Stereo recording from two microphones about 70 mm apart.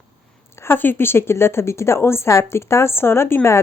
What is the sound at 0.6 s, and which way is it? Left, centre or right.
A woman's voice, left.